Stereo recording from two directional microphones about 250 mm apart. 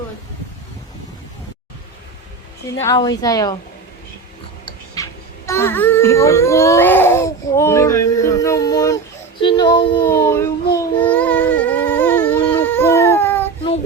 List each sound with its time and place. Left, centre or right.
2.8 s a woman's voice: centre
5.0 s music: centre
5.5 s speech: centre
9.4 s a sound: centre